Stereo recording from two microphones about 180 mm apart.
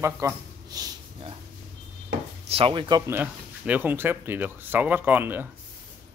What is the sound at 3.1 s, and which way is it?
Speech, 10° right (ahead or behind).